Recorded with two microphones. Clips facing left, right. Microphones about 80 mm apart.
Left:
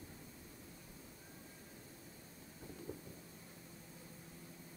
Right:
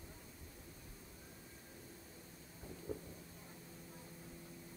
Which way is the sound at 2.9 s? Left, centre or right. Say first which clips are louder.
Right 5 dB; centre.